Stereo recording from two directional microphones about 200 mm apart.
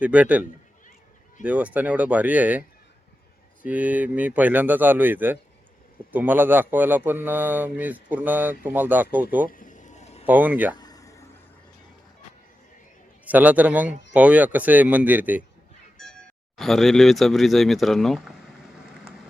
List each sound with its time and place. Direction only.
0.0 s a man's voice: 5° right (ahead or behind)
1.5 s a man's voice: 5° right (ahead or behind)
9.5 s a sound: 40° left (ahead or behind)
10.2 s a man's voice: 10° right (ahead or behind)
10.8 s a sound: 20° left (ahead or behind)
13.2 s a man's voice: 10° right (ahead or behind)
16.6 s speech: centre (ahead or behind)